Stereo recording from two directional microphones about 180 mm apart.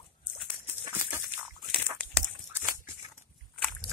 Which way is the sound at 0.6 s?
15° right (ahead or behind).